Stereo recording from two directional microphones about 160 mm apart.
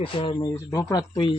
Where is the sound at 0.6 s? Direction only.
20° left (ahead or behind).